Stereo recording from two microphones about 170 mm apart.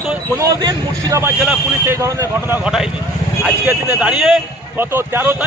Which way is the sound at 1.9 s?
15° right (ahead or behind).